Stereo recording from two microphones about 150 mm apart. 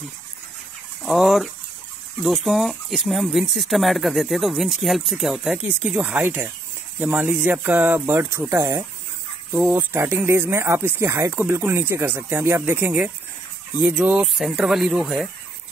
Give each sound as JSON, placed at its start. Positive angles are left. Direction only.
{"t": 1.0, "sound": "speech", "side_deg": 0}